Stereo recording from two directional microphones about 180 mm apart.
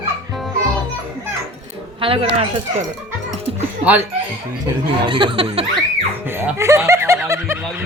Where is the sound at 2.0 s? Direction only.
30° right (ahead or behind).